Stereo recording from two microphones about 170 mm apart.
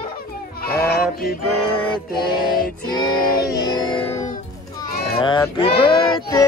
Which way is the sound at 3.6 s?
25° left (ahead or behind).